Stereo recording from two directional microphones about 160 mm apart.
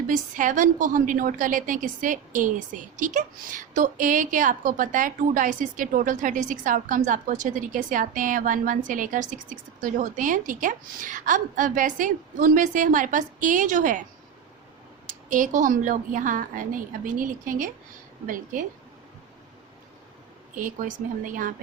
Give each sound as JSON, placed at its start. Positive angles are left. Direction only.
{"t": 0.1, "sound": "a woman's voice", "side_deg": -55}
{"t": 15.0, "sound": "a woman's voice", "side_deg": -55}
{"t": 20.6, "sound": "a woman's voice", "side_deg": -55}